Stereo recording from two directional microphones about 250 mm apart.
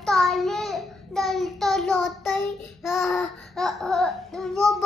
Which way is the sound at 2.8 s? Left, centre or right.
Centre.